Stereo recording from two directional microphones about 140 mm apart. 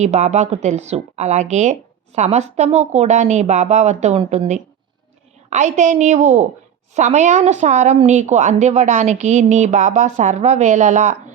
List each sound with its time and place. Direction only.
0.0 s a woman's voice: 55° right (ahead or behind)